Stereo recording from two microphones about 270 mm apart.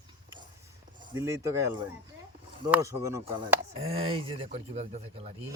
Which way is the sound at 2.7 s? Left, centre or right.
Centre.